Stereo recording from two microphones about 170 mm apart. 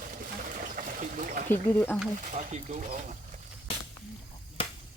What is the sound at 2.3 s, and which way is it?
Speech, 45° right (ahead or behind).